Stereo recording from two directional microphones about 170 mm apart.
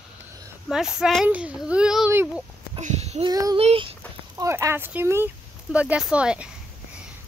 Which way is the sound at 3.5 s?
35° right (ahead or behind).